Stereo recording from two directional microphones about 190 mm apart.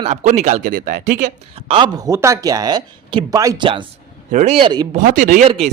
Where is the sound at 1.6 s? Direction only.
30° right (ahead or behind).